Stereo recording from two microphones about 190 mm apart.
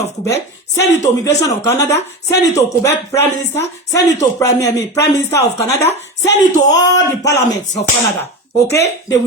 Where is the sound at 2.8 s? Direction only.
15° left (ahead or behind).